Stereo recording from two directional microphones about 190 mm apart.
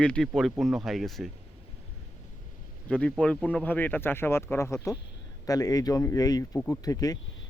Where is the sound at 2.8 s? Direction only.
5° left (ahead or behind).